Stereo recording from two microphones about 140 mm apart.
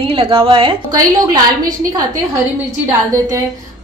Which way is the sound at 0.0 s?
40° right (ahead or behind).